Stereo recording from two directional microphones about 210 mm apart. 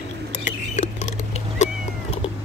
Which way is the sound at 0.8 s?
35° left (ahead or behind).